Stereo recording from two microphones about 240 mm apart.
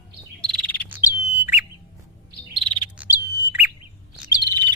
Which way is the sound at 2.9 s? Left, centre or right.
Centre.